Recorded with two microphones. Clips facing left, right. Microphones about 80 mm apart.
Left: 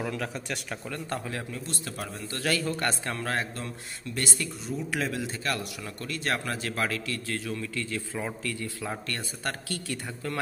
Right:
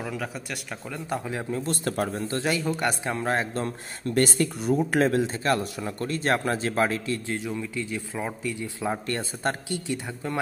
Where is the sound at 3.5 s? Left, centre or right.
Right.